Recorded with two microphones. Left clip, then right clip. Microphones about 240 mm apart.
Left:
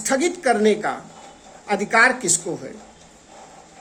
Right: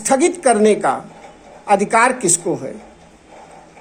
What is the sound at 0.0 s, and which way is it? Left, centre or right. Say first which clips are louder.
A woman's voice: right 6 dB; centre.